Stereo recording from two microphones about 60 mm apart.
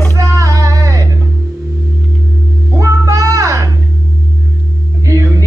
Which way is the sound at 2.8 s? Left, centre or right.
Right.